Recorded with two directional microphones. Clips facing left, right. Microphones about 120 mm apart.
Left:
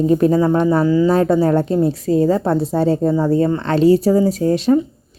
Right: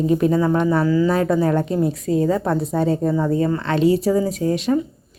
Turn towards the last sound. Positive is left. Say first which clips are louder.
# left 5 dB
turn(degrees=35)  # may be behind; listen again after turning